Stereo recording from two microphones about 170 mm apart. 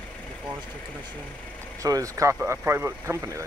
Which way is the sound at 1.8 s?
20° right (ahead or behind).